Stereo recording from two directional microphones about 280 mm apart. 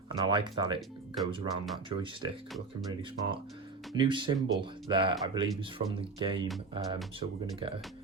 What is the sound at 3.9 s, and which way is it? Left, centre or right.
Speech, centre.